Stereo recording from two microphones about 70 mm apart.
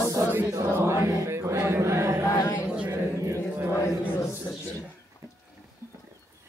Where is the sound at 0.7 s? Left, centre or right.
Right.